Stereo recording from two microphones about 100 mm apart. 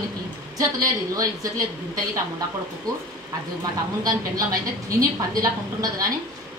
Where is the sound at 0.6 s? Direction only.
35° right (ahead or behind).